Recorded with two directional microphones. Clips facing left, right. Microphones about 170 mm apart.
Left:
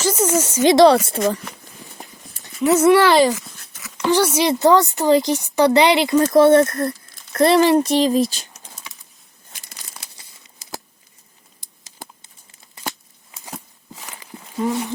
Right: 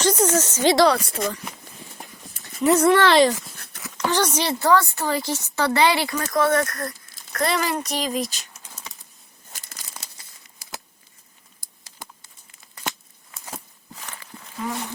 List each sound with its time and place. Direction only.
0.0 s a woman's voice: 5° left (ahead or behind)
1.0 s speech: 30° left (ahead or behind)
2.6 s a woman's voice: centre (ahead or behind); by 8.6 s 30° left (ahead or behind)
10.0 s crumpling: 10° left (ahead or behind)
11.6 s crumpling: 20° left (ahead or behind)
13.9 s walk: 10° left (ahead or behind)